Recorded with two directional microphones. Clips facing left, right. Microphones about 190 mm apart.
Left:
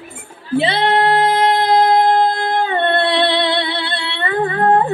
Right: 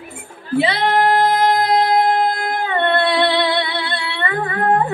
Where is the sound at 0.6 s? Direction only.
25° left (ahead or behind).